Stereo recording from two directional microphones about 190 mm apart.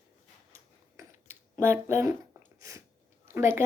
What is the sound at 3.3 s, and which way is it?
Speech, 15° right (ahead or behind).